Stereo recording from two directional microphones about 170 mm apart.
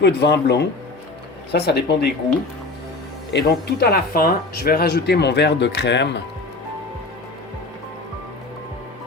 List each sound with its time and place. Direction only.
0.0 s speech: 90° left
1.5 s speech: 75° left (ahead or behind)
3.3 s speech: 65° left (ahead or behind); by 6.2 s 90° left